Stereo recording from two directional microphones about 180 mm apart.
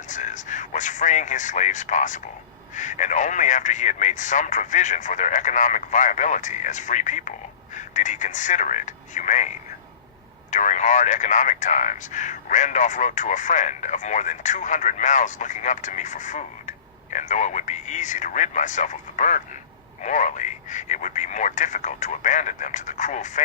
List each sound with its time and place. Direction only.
0.1 s a sound: 45° left (ahead or behind)
2.7 s speech: 45° left (ahead or behind)
10.5 s speech: 45° left (ahead or behind)